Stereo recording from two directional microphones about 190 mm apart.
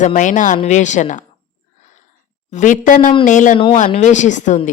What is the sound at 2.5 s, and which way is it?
A woman's voice, 40° left (ahead or behind).